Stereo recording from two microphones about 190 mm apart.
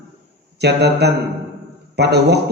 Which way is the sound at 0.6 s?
60° right (ahead or behind).